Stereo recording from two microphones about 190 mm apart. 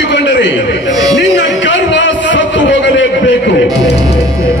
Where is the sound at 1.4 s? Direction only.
70° left (ahead or behind).